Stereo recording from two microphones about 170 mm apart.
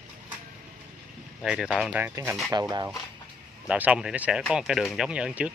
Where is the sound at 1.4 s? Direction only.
5° right (ahead or behind).